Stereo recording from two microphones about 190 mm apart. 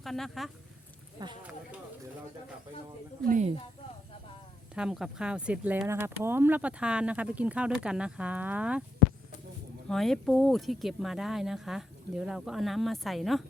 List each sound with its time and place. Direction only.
0.0 s speech: centre (ahead or behind)
1.2 s speech: 20° right (ahead or behind)
3.2 s a woman's voice: 40° right (ahead or behind)
4.7 s speech: 5° right (ahead or behind)
9.9 s speech: centre (ahead or behind)